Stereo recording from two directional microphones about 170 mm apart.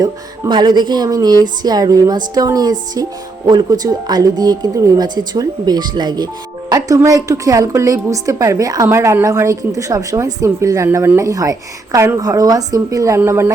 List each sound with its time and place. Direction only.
0.0 s a woman's voice: 25° right (ahead or behind)